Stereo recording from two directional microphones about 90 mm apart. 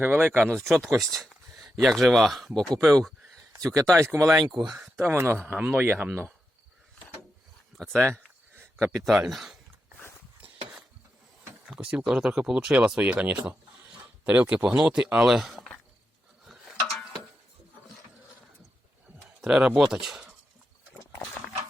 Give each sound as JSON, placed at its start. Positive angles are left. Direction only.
{"t": 0.0, "sound": "speech", "side_deg": -25}
{"t": 0.3, "sound": "speech", "side_deg": 10}
{"t": 0.9, "sound": "a sound", "side_deg": 5}
{"t": 1.8, "sound": "speech", "side_deg": 0}
{"t": 3.9, "sound": "speech", "side_deg": -35}
{"t": 4.6, "sound": "speech", "side_deg": -5}
{"t": 4.9, "sound": "speech", "side_deg": -30}
{"t": 7.8, "sound": "speech", "side_deg": 5}
{"t": 11.7, "sound": "speech", "side_deg": -10}
{"t": 16.6, "sound": "a sound", "side_deg": 0}
{"t": 19.4, "sound": "speech", "side_deg": -5}